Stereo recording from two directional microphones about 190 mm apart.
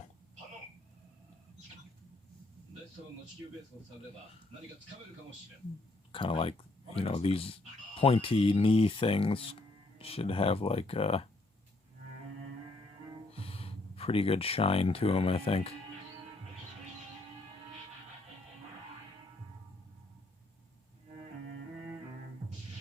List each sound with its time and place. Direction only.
6.1 s speech: 25° left (ahead or behind)
13.3 s speech: 30° left (ahead or behind)